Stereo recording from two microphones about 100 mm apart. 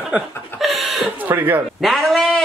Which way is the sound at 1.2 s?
20° right (ahead or behind).